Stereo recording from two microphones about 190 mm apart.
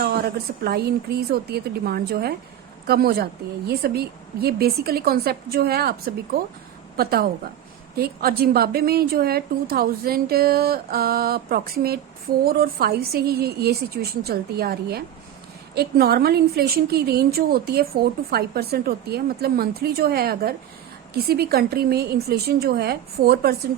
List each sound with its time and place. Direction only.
0.0 s a woman's voice: 55° right (ahead or behind)